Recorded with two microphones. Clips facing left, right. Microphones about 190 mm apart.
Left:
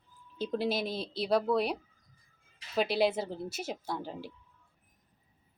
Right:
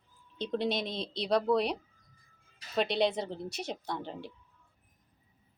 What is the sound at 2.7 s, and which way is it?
A woman's voice, 5° left (ahead or behind).